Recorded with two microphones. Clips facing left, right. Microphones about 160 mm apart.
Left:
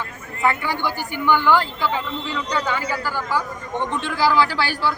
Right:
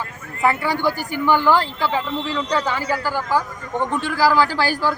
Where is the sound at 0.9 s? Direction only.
35° right (ahead or behind).